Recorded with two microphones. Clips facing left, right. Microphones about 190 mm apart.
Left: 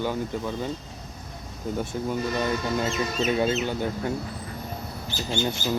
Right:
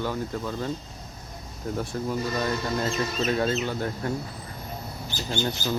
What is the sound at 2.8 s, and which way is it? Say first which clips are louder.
Speech: left 1 dB; 5° left (ahead or behind).